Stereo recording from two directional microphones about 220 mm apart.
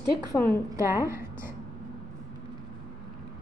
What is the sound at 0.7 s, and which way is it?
Speech, 15° right (ahead or behind).